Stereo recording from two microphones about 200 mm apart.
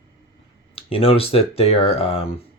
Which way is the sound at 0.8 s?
30° left (ahead or behind).